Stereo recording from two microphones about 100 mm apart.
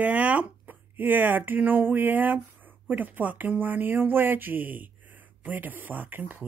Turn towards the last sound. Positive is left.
turn(degrees=-20)  # may be behind; listen again after turning